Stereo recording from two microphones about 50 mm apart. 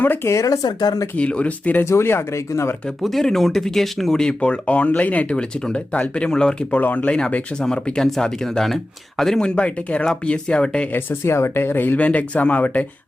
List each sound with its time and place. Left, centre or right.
0.3 s speech: left
1.1 s speech: left
1.8 s speech: left
2.5 s speech: left
3.0 s speech: centre
6.7 s speech: left
7.6 s speech: centre
9.4 s speech: left
10.9 s speech: left
11.9 s speech: left